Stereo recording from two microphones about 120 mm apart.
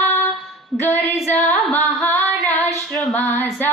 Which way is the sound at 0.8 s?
15° left (ahead or behind).